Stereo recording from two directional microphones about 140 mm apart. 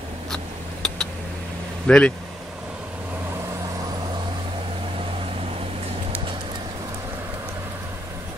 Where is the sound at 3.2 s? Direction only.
20° right (ahead or behind).